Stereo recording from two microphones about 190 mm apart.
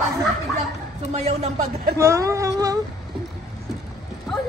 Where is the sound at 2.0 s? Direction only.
15° right (ahead or behind).